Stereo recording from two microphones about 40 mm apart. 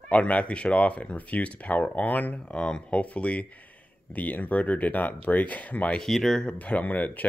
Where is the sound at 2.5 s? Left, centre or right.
Left.